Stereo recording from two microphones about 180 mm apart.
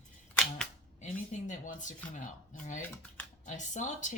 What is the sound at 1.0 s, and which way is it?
Speech, 45° left (ahead or behind).